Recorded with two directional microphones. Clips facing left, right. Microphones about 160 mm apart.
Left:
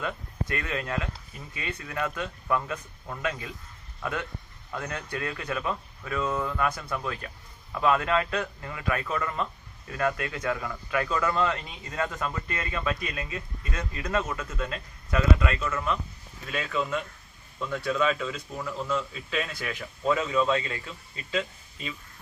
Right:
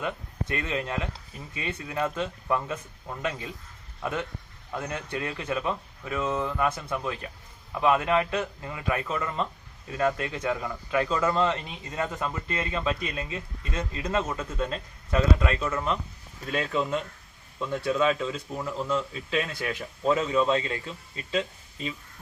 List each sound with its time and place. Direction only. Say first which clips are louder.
0.0 s a man's voice: right 1 dB; 25° right (ahead or behind)